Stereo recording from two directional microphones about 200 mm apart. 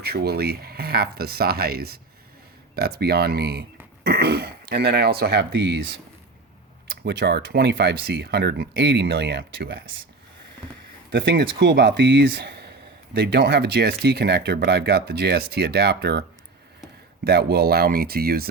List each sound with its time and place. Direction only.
0.0 s speech: 50° right (ahead or behind)
11.1 s speech: 55° right (ahead or behind)
17.2 s speech: 50° right (ahead or behind)